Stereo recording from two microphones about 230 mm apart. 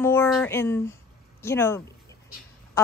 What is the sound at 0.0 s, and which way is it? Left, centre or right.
A woman's voice, centre.